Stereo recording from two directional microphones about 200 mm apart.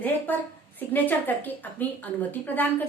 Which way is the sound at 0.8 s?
10° left (ahead or behind).